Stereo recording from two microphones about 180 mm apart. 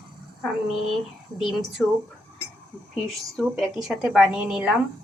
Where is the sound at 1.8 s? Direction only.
Centre (ahead or behind).